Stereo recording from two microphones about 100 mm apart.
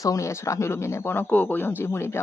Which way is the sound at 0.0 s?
35° left (ahead or behind).